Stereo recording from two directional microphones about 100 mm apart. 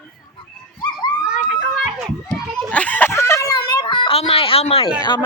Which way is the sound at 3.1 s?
30° left (ahead or behind).